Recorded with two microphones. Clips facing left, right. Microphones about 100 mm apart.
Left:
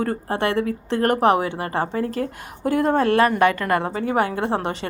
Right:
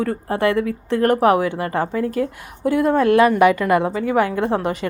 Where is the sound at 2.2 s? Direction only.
45° left (ahead or behind).